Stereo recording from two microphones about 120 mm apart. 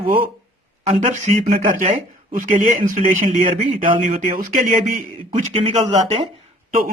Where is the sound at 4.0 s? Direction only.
90° right.